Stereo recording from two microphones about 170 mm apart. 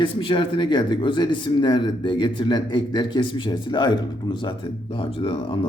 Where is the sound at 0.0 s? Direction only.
30° left (ahead or behind).